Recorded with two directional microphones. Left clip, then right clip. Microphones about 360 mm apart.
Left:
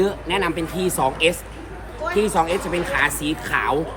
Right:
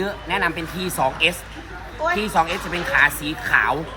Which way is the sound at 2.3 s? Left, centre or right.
Centre.